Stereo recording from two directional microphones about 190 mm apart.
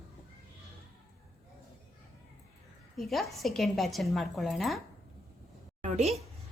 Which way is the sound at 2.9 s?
Centre (ahead or behind).